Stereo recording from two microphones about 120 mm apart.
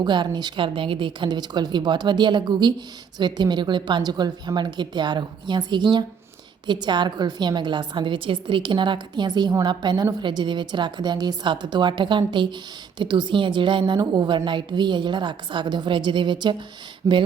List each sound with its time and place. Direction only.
0.0 s a woman's voice: 40° right (ahead or behind)
17.0 s speech: 25° right (ahead or behind)